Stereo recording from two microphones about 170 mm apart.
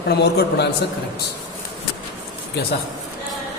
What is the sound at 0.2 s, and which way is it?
Speech, 75° left (ahead or behind).